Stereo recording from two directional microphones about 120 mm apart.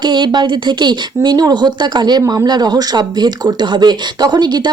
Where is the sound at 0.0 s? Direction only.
40° right (ahead or behind).